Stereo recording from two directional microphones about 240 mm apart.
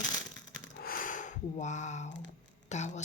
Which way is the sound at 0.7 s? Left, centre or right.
Left.